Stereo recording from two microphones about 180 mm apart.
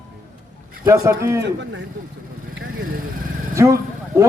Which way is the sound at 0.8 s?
15° right (ahead or behind).